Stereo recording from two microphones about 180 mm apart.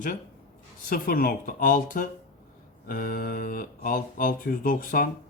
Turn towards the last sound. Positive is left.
turn(degrees=50)  # may be behind; listen again after turning